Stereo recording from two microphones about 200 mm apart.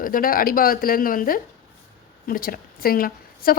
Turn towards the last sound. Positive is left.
turn(degrees=45)  # may be behind; listen again after turning